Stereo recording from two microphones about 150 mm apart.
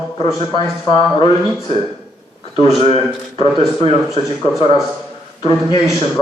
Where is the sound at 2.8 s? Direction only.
40° left (ahead or behind).